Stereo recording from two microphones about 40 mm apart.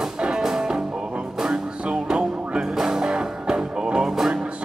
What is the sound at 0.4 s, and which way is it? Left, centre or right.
Music, centre.